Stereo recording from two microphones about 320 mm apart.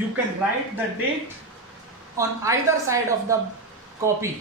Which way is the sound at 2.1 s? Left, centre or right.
Centre.